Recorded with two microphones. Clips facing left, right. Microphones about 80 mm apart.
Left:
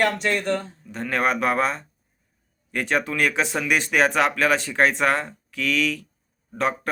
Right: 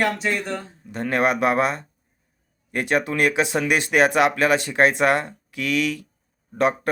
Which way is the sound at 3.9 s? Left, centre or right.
Right.